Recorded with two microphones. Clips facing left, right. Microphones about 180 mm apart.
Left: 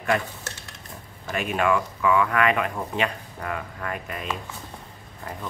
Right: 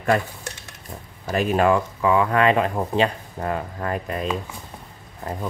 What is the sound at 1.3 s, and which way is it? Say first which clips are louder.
Speech: right 5 dB; 35° right (ahead or behind).